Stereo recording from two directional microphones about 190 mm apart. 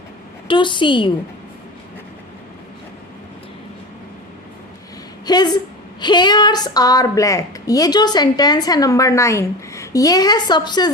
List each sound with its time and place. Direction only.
0.4 s a woman's voice: 25° left (ahead or behind)
5.2 s a woman's voice: 20° left (ahead or behind)